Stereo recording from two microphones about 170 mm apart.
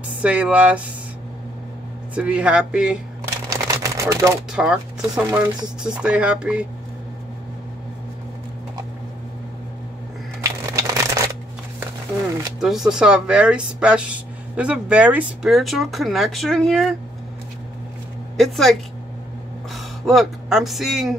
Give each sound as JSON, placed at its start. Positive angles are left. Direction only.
{"t": 0.2, "sound": "speech", "side_deg": -10}
{"t": 2.1, "sound": "speech", "side_deg": -5}
{"t": 3.4, "sound": "a sound", "side_deg": -20}
{"t": 4.5, "sound": "speech", "side_deg": -5}
{"t": 10.4, "sound": "crushing", "side_deg": -20}
{"t": 12.5, "sound": "speech", "side_deg": 0}
{"t": 18.4, "sound": "speech", "side_deg": 0}